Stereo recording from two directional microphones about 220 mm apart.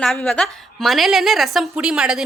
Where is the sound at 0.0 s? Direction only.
5° left (ahead or behind).